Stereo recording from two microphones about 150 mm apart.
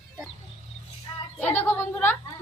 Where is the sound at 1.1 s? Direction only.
30° left (ahead or behind).